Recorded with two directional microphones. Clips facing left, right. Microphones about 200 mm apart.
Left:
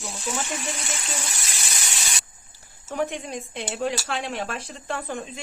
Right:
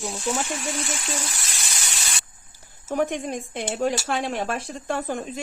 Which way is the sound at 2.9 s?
45° right (ahead or behind).